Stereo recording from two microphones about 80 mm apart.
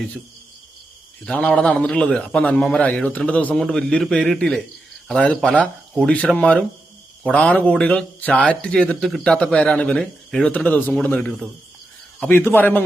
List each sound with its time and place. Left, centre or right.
1.2 s a man's voice: centre
5.5 s speech: centre
6.1 s a man's voice: centre
10.5 s a man's voice: left